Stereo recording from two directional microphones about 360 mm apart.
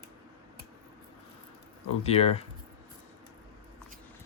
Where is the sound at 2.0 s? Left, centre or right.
Centre.